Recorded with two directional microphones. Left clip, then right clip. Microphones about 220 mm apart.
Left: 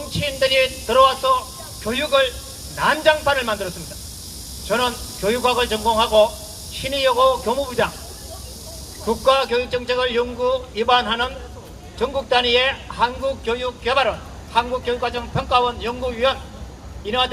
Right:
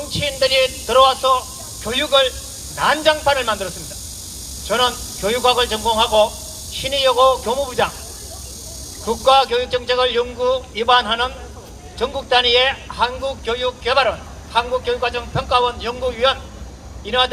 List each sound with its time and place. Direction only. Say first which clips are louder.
0.1 s a man's voice: right 1 dB; 30° right (ahead or behind)
4.7 s a man's voice: right 3 dB; 30° right (ahead or behind)
9.0 s a man's voice: right 3 dB; 30° right (ahead or behind)